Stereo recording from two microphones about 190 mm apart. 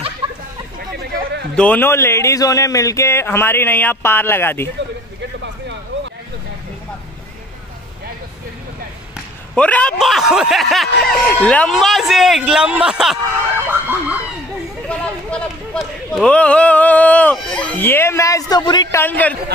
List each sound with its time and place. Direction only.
0.2 s chatter: 30° right (ahead or behind)
0.7 s a sound: 60° right (ahead or behind)
1.5 s a man's voice: 5° left (ahead or behind)
9.6 s speech: 5° left (ahead or behind); by 14.1 s 10° right (ahead or behind)
14.9 s a man's voice: 5° left (ahead or behind)